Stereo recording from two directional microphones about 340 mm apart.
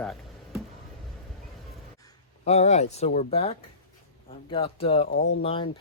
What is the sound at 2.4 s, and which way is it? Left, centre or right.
Speech, centre.